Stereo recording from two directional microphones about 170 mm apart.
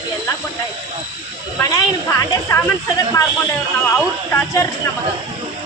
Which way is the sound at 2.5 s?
20° left (ahead or behind).